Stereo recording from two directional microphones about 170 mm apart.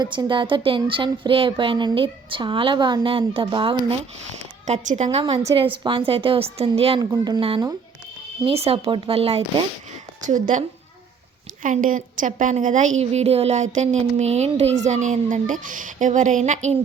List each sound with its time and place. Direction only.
0.0 s speech: 25° right (ahead or behind)
4.6 s a woman's voice: 45° right (ahead or behind)
7.0 s a woman's voice: 25° right (ahead or behind)
10.2 s a woman's voice: 50° right (ahead or behind)
11.6 s a woman's voice: 50° right (ahead or behind)